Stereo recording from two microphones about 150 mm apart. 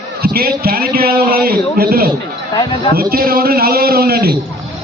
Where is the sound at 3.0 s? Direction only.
75° right (ahead or behind).